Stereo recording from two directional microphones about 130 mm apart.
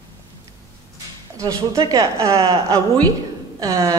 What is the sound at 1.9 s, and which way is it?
A woman's voice, 25° right (ahead or behind).